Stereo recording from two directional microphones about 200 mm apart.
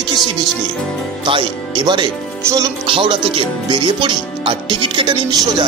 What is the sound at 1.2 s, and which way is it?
Speech, 25° right (ahead or behind).